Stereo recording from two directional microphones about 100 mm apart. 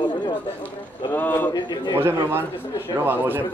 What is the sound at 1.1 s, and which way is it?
Speech, 20° left (ahead or behind).